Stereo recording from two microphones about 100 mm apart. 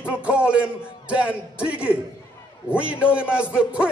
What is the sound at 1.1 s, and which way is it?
A man's voice, 10° right (ahead or behind).